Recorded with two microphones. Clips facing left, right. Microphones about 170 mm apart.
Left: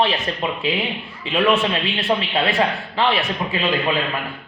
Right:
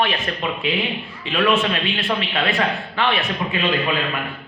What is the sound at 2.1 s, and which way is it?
Speech, 30° left (ahead or behind).